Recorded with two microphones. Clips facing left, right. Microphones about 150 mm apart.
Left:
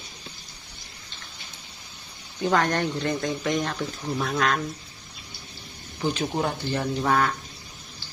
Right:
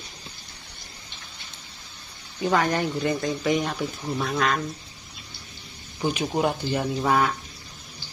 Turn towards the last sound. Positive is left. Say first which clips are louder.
# right 1 dB
turn(degrees=-5)  # may be behind; listen again after turning